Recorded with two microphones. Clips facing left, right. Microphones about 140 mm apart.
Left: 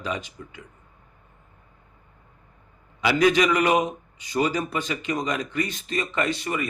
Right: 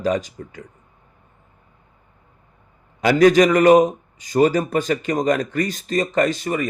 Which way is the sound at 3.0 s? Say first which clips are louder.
Right 7 dB; 45° right (ahead or behind).